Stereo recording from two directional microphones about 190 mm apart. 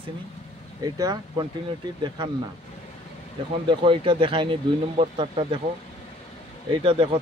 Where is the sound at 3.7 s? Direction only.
25° right (ahead or behind).